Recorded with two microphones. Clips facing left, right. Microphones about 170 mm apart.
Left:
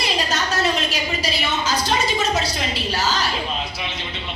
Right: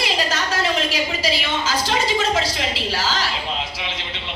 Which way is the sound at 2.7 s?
90° right.